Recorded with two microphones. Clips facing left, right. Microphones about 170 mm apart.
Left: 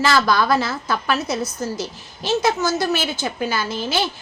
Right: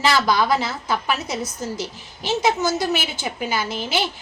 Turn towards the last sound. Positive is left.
turn(degrees=-15)  # may be behind; listen again after turning